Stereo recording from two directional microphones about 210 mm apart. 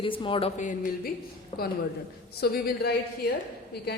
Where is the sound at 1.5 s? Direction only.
25° left (ahead or behind).